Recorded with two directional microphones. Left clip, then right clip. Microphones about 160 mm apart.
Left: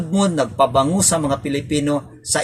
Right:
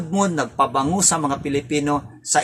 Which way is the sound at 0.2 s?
30° right (ahead or behind).